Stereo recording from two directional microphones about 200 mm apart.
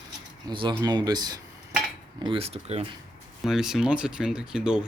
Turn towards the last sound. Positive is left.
turn(degrees=-5)  # may be behind; listen again after turning